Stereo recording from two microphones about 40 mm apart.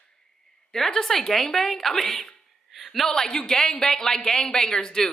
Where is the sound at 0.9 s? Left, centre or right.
Centre.